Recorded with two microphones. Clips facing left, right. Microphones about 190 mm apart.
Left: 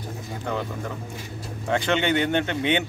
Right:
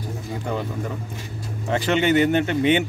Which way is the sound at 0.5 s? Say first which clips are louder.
Right 1 dB; 5° right (ahead or behind).